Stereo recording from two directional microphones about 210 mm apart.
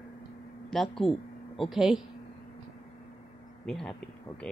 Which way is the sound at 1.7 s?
Centre (ahead or behind).